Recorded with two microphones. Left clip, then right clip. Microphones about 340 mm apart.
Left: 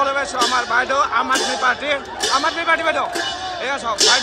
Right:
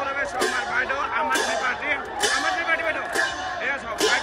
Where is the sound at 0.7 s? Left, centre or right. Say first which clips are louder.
Left 7 dB; centre.